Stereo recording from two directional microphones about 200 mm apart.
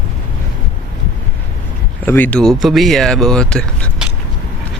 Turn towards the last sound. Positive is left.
turn(degrees=5)  # may be behind; listen again after turning